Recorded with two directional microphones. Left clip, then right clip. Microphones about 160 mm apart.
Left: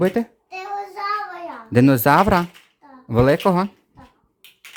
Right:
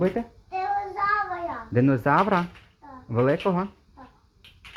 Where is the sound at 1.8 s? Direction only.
70° left (ahead or behind).